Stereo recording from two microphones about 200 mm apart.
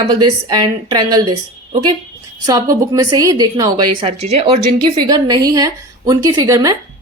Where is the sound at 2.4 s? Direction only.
15° right (ahead or behind).